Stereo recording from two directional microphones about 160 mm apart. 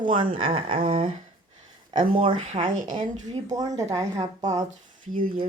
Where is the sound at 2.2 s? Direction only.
35° right (ahead or behind).